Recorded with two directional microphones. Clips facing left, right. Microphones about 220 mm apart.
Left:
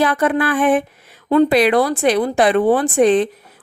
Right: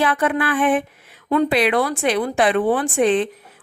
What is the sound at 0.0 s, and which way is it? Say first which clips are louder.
Speech: left 3 dB; 40° left (ahead or behind).